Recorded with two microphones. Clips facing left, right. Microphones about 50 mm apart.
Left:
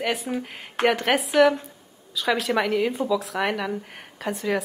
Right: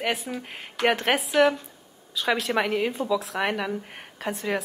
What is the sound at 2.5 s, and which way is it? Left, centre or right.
Speech, right.